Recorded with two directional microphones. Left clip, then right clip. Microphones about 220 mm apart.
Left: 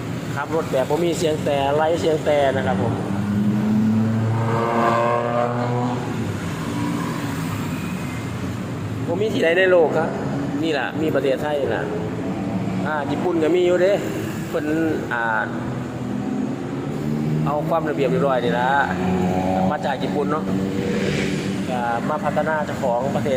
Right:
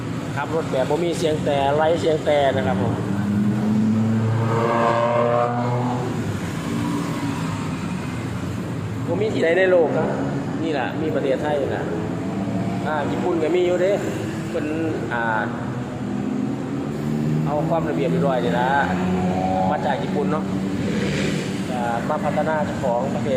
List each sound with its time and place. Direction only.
1.0 s speech: 5° left (ahead or behind)
9.2 s speech: 10° left (ahead or behind)
11.3 s speech: 15° left (ahead or behind)
13.4 s speech: 15° left (ahead or behind)
15.1 s speech: 15° left (ahead or behind)
18.0 s speech: 15° left (ahead or behind)
22.1 s speech: 10° left (ahead or behind)